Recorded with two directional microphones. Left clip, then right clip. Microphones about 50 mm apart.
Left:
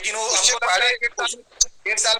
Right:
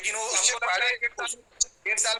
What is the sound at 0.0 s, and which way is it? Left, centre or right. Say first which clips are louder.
Speech: left 6 dB; left.